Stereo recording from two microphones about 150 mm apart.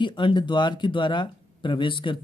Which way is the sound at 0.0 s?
30° left (ahead or behind).